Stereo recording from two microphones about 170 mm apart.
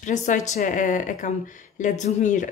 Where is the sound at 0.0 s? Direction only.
45° left (ahead or behind).